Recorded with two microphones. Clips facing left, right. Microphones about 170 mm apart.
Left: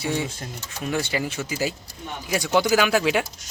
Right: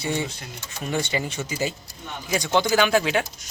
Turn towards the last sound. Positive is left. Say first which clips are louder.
# even
turn(degrees=5)  # may be behind; listen again after turning